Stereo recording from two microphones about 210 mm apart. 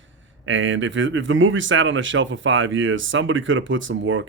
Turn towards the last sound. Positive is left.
turn(degrees=-65)  # may be behind; listen again after turning